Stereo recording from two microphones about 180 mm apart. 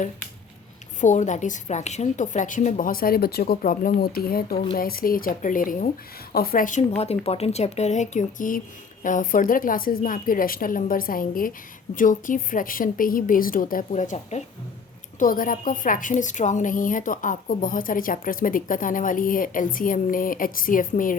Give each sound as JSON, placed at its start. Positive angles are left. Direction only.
{"t": 1.0, "sound": "a woman's voice", "side_deg": 40}